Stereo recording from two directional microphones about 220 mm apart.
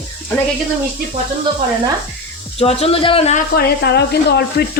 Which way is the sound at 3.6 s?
50° left (ahead or behind).